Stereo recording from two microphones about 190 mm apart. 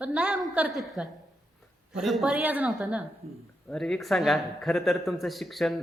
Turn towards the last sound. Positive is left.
turn(degrees=0)  # may be behind; listen again after turning